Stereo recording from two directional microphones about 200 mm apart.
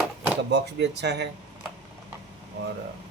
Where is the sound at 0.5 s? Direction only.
60° right (ahead or behind).